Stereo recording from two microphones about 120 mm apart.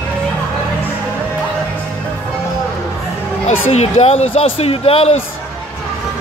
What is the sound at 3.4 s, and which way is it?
Speech, 60° left (ahead or behind).